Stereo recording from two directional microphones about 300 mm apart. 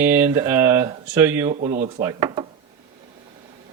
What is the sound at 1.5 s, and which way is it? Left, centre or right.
Speech, right.